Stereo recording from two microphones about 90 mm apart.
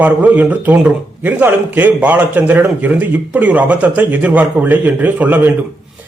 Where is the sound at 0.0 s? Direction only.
20° right (ahead or behind).